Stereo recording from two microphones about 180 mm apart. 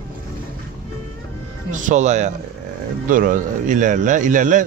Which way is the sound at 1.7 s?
45° right (ahead or behind).